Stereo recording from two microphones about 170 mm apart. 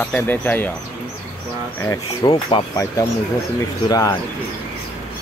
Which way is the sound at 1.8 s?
20° left (ahead or behind).